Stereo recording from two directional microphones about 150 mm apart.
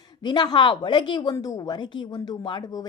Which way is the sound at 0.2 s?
30° left (ahead or behind).